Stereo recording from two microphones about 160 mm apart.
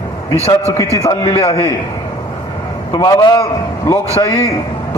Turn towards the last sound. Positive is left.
turn(degrees=20)  # may be behind; listen again after turning